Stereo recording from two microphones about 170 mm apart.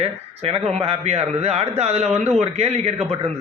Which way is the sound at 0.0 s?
35° right (ahead or behind).